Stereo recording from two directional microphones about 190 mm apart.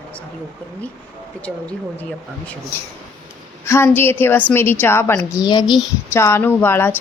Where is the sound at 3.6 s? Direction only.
15° left (ahead or behind).